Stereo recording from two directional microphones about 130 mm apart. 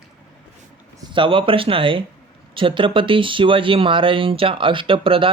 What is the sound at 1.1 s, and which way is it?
Speech, 40° right (ahead or behind).